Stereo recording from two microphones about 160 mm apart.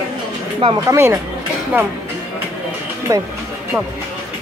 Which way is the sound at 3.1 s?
20° right (ahead or behind).